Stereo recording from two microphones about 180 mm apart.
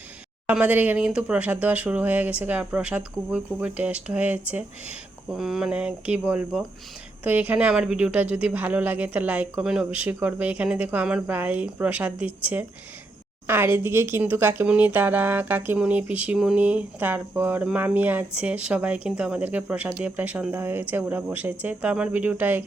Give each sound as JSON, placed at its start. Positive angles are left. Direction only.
{"t": 0.4, "sound": "speech", "side_deg": -10}